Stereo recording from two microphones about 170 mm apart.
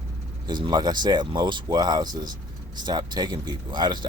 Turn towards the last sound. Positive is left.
turn(degrees=-25)  # may be behind; listen again after turning